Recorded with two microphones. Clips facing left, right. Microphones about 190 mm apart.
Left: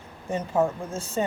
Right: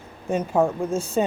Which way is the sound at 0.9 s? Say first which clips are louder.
Right 6 dB; 15° right (ahead or behind).